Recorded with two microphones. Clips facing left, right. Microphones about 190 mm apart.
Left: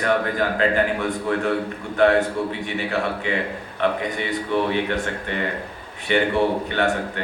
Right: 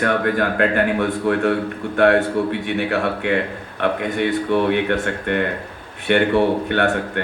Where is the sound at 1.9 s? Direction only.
60° right (ahead or behind).